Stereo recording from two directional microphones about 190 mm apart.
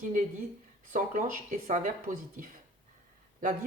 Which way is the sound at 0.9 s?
45° right (ahead or behind).